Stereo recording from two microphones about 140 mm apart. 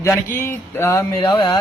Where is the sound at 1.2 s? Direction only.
35° left (ahead or behind).